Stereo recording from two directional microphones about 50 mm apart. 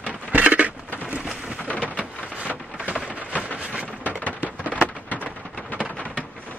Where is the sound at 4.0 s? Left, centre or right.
Left.